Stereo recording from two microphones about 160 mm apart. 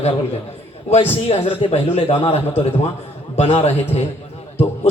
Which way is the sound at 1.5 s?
40° left (ahead or behind).